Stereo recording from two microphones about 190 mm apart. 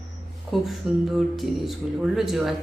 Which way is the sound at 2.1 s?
Centre (ahead or behind).